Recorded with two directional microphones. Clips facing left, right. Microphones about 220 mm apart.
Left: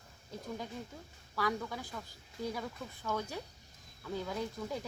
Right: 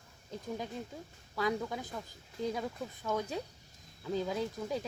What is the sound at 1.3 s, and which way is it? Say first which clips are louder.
Speech: right 2 dB; 20° right (ahead or behind).